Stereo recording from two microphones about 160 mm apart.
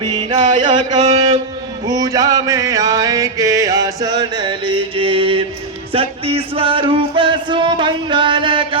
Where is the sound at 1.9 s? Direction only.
20° right (ahead or behind).